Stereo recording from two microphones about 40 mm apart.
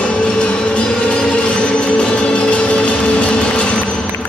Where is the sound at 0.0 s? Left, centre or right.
Left.